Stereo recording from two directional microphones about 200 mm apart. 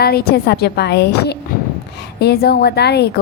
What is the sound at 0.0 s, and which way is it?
A woman's voice, 50° left (ahead or behind).